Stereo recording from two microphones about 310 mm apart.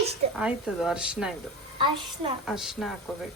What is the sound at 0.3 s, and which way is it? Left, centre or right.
Speech, centre.